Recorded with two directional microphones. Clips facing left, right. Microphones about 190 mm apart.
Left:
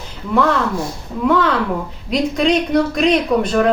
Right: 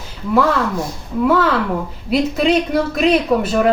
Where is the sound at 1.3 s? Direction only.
5° right (ahead or behind).